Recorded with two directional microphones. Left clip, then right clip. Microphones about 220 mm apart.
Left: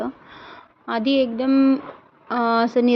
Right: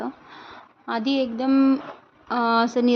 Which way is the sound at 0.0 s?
10° left (ahead or behind).